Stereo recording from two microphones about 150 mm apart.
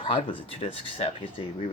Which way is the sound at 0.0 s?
35° left (ahead or behind).